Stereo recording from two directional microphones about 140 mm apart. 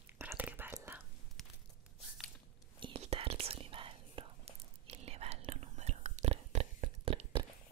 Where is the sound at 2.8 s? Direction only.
45° right (ahead or behind).